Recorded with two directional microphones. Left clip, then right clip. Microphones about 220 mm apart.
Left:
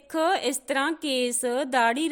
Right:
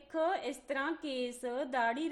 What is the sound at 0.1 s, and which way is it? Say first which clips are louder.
A woman's voice: left 9 dB; 40° left (ahead or behind).